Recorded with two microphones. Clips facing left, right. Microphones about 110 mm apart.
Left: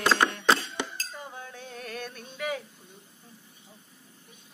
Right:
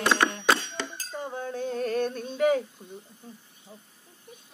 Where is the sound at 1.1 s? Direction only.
30° right (ahead or behind).